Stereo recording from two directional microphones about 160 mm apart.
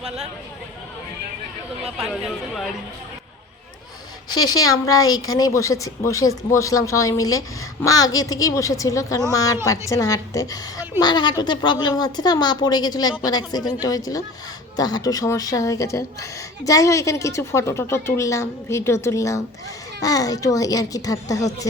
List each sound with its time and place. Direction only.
1.8 s speech: centre (ahead or behind)
4.3 s speech: 25° left (ahead or behind)